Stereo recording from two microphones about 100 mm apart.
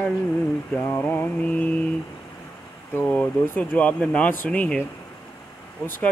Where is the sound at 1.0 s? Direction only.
20° left (ahead or behind).